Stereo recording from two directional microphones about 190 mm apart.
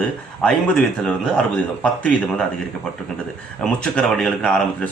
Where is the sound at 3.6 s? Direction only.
5° left (ahead or behind).